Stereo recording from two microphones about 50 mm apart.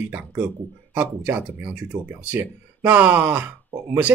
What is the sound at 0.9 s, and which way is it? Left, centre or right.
Speech, right.